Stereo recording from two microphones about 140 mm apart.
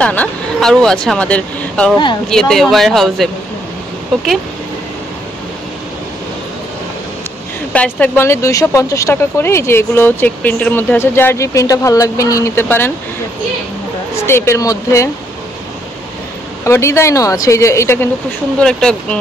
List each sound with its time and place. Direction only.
0.0 s speech: 10° left (ahead or behind)
7.7 s speech: 10° left (ahead or behind)
14.2 s speech: 20° left (ahead or behind)
16.6 s speech: 20° left (ahead or behind)
18.6 s speech: 5° left (ahead or behind)